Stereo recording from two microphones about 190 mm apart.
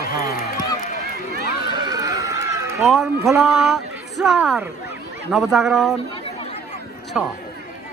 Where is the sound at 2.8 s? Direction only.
Centre (ahead or behind).